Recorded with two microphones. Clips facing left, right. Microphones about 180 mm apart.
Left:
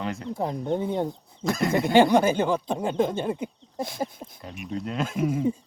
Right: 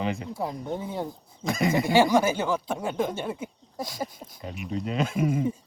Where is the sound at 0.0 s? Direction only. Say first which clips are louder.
Right 2 dB; centre (ahead or behind).